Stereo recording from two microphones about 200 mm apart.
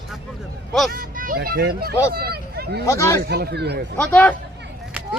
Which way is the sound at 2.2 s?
50° right (ahead or behind).